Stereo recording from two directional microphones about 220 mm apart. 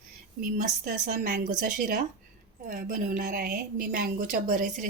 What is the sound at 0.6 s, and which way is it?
Speech, 40° right (ahead or behind).